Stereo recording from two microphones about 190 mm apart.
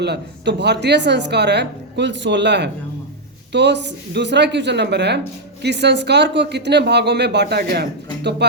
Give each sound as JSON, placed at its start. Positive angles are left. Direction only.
{"t": 0.0, "sound": "speech", "side_deg": -60}